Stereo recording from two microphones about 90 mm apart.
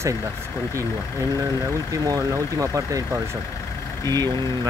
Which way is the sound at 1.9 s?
40° right (ahead or behind).